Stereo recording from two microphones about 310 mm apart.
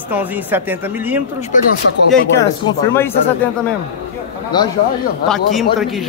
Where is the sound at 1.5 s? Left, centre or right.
Left.